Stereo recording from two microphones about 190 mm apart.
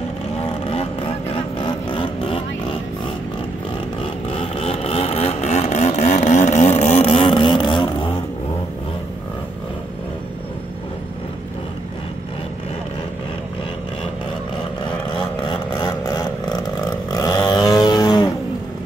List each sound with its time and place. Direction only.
0.4 s vehicle: 30° left (ahead or behind)
4.0 s vehicle: 30° left (ahead or behind)
15.1 s vehicle: 25° left (ahead or behind)